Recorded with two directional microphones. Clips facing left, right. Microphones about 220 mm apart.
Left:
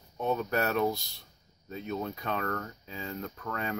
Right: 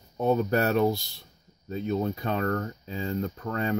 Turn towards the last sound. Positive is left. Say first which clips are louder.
# right 6 dB
turn(degrees=-30)  # may be behind; listen again after turning